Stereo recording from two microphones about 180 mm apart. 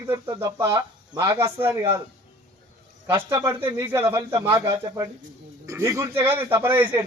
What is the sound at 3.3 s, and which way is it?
Speech, 15° right (ahead or behind).